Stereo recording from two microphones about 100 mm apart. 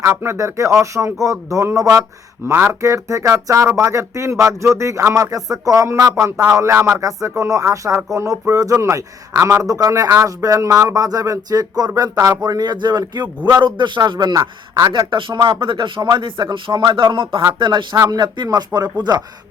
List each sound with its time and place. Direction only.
0.0 s speech: 30° right (ahead or behind)
15.1 s speech: 50° right (ahead or behind)